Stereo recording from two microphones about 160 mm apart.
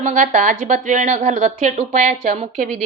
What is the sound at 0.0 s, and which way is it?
A woman's voice, 50° right (ahead or behind).